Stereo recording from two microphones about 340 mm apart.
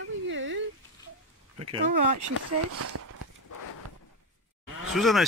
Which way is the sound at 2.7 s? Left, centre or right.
Right.